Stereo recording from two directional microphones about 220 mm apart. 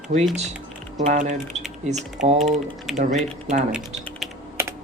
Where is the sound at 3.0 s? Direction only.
35° right (ahead or behind).